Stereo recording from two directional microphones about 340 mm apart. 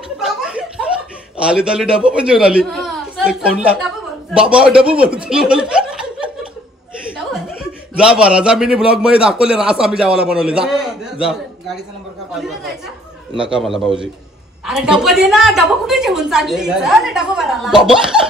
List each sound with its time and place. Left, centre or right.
0.2 s chuckle: centre
1.4 s a man's voice: centre
7.9 s a man's voice: centre